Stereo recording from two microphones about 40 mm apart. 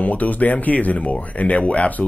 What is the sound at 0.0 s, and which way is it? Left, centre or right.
Speech, left.